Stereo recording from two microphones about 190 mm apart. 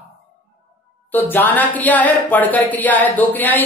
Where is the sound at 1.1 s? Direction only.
10° left (ahead or behind).